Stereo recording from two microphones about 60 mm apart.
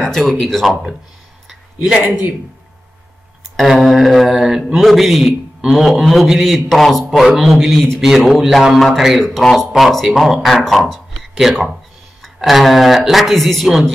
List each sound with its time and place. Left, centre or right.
0.3 s speech: centre
2.0 s a man's voice: right
3.6 s speech: centre
11.3 s speech: centre